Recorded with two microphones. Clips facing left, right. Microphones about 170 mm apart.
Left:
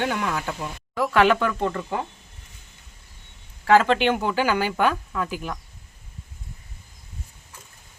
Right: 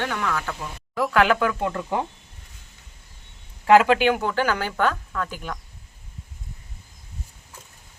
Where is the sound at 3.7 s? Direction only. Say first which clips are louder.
Right 2 dB; 10° right (ahead or behind); by 5.5 s 10° left (ahead or behind).